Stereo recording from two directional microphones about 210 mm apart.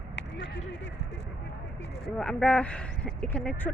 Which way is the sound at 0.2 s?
55° left (ahead or behind).